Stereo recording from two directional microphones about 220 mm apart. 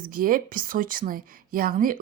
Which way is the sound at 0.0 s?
40° right (ahead or behind).